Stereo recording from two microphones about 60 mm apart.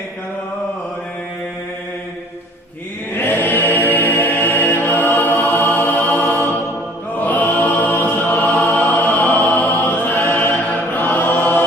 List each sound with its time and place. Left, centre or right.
3.1 s mantra: left
7.2 s music: left
10.3 s chant: left